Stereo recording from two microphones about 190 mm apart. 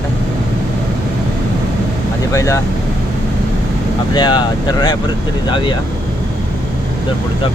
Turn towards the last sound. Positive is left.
turn(degrees=25)  # may be behind; listen again after turning